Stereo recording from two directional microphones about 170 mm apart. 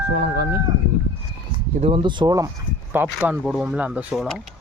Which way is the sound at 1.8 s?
30° right (ahead or behind).